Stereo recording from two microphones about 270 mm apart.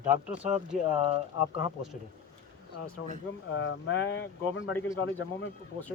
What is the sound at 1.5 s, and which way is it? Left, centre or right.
Speech, centre.